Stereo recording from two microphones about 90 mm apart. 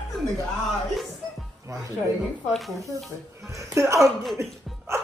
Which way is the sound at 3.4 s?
35° right (ahead or behind).